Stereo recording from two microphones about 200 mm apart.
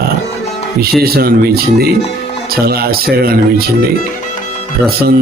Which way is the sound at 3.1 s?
50° right (ahead or behind).